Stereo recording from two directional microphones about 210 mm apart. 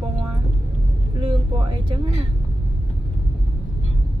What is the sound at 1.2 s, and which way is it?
Speech, 25° right (ahead or behind).